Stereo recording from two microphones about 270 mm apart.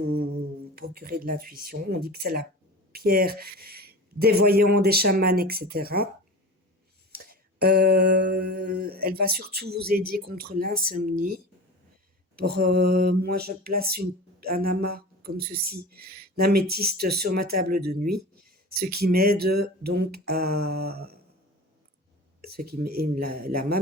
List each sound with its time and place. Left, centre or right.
0.8 s speech: right
7.1 s speech: right
12.4 s speech: right
22.4 s speech: right